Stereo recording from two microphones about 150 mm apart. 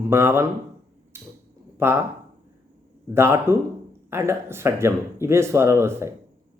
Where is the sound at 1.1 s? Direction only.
15° right (ahead or behind).